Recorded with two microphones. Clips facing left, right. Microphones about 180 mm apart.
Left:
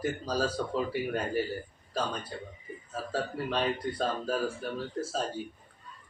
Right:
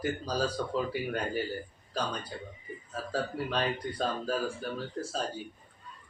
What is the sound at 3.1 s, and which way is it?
Speech, centre (ahead or behind).